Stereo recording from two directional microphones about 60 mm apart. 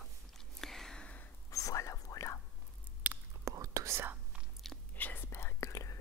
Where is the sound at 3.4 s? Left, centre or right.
Right.